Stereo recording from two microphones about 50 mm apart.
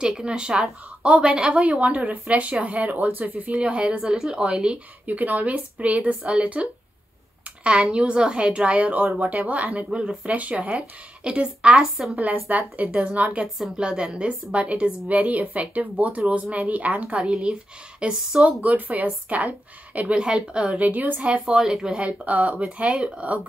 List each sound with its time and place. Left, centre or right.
0.0 s a woman's voice: centre
1.6 s a woman's voice: right
5.0 s a woman's voice: right
11.8 s a woman's voice: centre
12.2 s speech: right
13.4 s a woman's voice: centre
18.6 s a woman's voice: right
20.9 s speech: right
21.5 s speech: centre
21.9 s a woman's voice: right